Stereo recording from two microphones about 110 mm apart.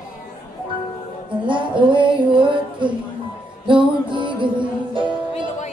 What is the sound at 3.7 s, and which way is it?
Music, 50° right (ahead or behind).